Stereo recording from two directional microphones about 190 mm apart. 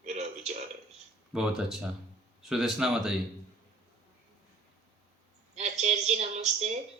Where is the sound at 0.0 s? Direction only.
35° right (ahead or behind).